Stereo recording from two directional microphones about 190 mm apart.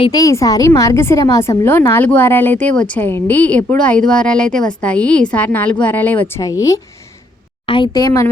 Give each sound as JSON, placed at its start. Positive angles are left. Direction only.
{"t": 0.0, "sound": "a woman's voice", "side_deg": 20}